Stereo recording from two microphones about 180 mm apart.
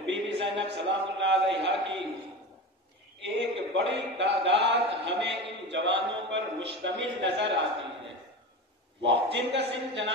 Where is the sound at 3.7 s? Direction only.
80° right.